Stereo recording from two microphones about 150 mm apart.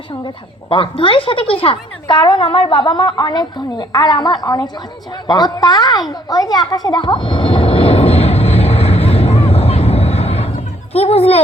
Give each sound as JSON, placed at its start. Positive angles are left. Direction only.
{"t": 0.7, "sound": "a woman's voice", "side_deg": 35}
{"t": 6.1, "sound": "vehicle", "side_deg": 25}
{"t": 10.9, "sound": "a woman's voice", "side_deg": 40}